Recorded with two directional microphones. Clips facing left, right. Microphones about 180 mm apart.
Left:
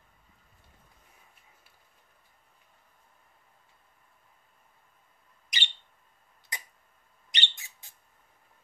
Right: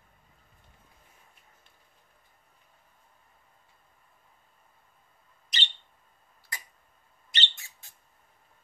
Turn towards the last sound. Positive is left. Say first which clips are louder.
# right 1 dB
turn(degrees=15)  # may be behind; listen again after turning